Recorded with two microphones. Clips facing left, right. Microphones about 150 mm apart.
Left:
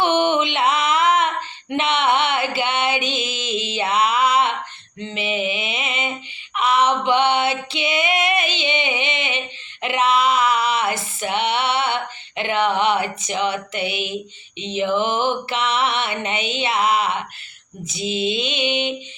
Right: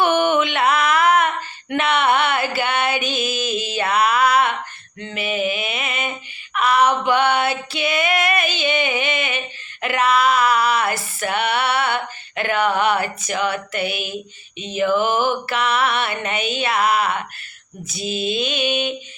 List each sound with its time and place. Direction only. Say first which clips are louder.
0.0 s music: right 1 dB; 20° left (ahead or behind)
4.9 s a sound: right 1 dB; 20° left (ahead or behind)
9.8 s female singing: right 1 dB; 20° left (ahead or behind)
14.6 s mantra: right 2 dB; 20° left (ahead or behind)